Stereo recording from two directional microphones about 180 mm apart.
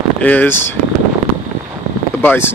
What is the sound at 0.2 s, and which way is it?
Speech, 10° left (ahead or behind).